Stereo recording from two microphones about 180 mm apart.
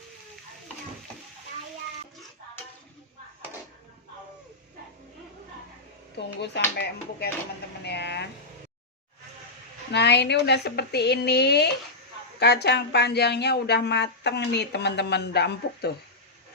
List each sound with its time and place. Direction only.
6.1 s speech: 70° left (ahead or behind)
7.9 s vehicle: 70° left (ahead or behind)
9.9 s a woman's voice: 70° left (ahead or behind)